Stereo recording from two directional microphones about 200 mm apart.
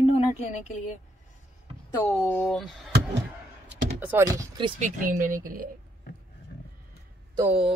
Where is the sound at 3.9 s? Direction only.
10° right (ahead or behind).